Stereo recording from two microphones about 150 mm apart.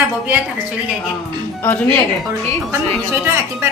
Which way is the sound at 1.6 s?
15° left (ahead or behind).